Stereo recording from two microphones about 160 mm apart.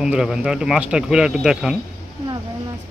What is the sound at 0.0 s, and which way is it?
Speech, 5° right (ahead or behind).